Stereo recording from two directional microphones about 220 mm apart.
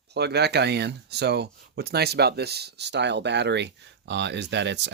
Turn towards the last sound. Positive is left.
turn(degrees=-50)  # may be behind; listen again after turning